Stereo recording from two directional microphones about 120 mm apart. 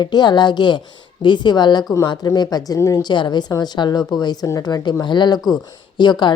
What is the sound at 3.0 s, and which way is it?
Speech, 40° left (ahead or behind).